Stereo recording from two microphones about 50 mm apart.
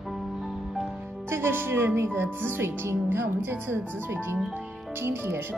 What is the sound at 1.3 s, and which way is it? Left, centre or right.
A woman's voice, right.